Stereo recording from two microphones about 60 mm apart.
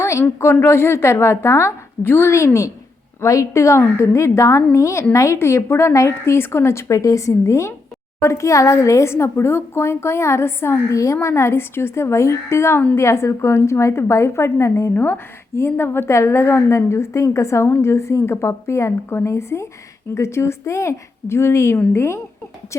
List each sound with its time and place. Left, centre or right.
0.0 s a woman's voice: left
5.4 s a woman's voice: left
5.9 s a woman's voice: left
10.9 s a woman's voice: left
14.9 s a woman's voice: left